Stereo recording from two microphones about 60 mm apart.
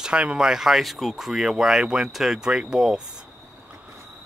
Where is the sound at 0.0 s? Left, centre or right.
Centre.